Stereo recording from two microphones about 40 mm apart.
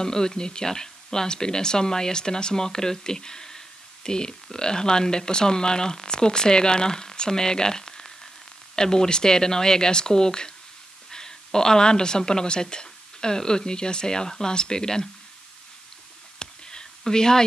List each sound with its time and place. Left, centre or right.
0.0 s a woman's voice: centre
16.3 s whispering: centre